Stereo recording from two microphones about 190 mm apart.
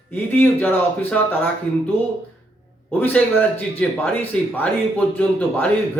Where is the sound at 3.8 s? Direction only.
10° left (ahead or behind).